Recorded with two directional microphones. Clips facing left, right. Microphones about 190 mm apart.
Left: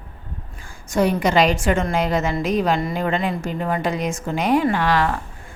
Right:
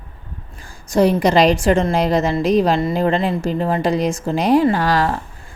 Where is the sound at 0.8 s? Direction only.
35° right (ahead or behind).